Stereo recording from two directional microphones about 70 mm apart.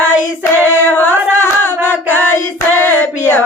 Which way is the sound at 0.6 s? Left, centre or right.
Left.